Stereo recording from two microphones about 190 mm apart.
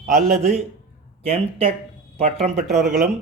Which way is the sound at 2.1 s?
35° right (ahead or behind).